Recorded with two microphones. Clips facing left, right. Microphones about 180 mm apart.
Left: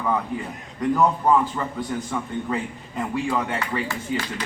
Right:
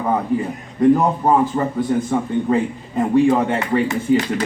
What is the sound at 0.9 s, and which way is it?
A man's voice, 35° right (ahead or behind).